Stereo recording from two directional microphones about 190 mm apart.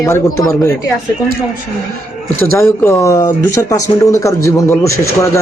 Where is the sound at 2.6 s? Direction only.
15° left (ahead or behind).